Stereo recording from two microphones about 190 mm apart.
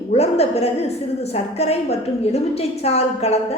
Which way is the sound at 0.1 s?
35° left (ahead or behind).